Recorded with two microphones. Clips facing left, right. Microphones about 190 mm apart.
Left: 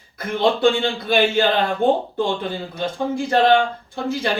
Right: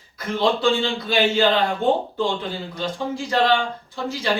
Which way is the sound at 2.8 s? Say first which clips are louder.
Left 4 dB; 55° left (ahead or behind).